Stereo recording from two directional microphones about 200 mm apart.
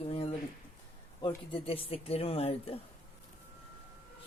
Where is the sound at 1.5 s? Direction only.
30° left (ahead or behind).